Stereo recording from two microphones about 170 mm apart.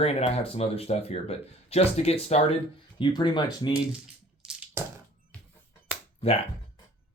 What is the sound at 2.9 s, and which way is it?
Speech, 30° left (ahead or behind).